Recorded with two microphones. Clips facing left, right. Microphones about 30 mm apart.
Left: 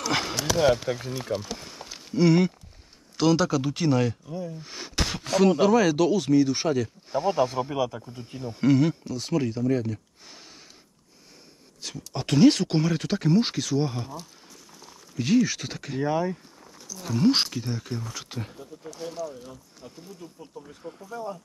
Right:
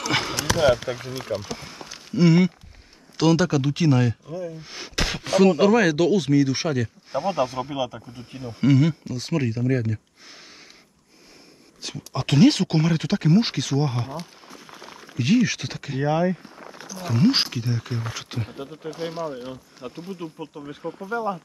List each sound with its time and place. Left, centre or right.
0.0 s basketball bounce: centre
0.8 s speech: right
1.6 s a sound: centre
3.2 s speech: centre
11.8 s speech: centre
13.9 s boiling: right
15.1 s speech: centre
16.0 s speech: right
16.5 s a sound: right
17.0 s speech: right
17.3 s speech: centre
18.6 s speech: right
18.9 s speech: right
21.0 s speech: right